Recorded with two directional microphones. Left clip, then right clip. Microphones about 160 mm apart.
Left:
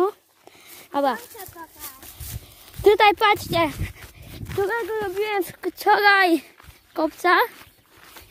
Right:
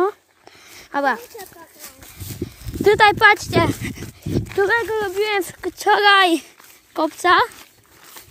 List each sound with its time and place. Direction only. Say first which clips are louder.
0.0 s a sound: right 2 dB; 5° left (ahead or behind)
2.8 s speech: right 3 dB; 15° left (ahead or behind)
4.5 s speech: right 5 dB; 35° right (ahead or behind)
5.4 s speech: right 2 dB; centre (ahead or behind)